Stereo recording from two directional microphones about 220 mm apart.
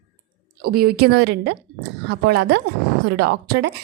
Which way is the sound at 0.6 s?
45° right (ahead or behind).